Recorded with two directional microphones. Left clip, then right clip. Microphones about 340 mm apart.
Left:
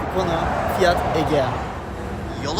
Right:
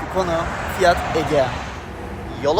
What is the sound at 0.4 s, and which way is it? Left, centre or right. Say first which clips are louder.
Speech: left 4 dB; left.